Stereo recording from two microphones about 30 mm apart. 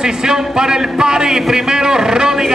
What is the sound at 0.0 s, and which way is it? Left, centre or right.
A man's voice, right.